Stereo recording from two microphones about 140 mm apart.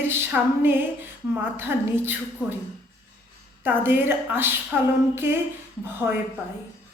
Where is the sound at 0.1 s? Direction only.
15° right (ahead or behind).